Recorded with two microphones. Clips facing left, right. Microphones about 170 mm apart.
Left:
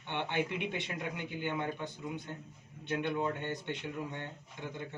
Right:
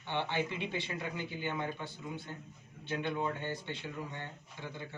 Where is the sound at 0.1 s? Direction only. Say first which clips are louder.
Even; 15° left (ahead or behind).